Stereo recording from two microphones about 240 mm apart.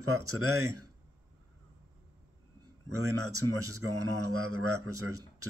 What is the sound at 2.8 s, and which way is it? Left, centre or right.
Speech, right.